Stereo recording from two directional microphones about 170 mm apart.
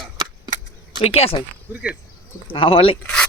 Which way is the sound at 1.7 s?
15° right (ahead or behind).